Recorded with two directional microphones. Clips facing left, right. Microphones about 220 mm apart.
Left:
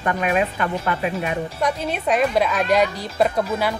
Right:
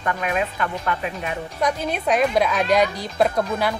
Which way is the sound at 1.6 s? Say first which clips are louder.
Right 3 dB; centre (ahead or behind).